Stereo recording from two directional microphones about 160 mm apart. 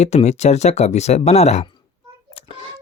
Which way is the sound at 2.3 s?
35° left (ahead or behind).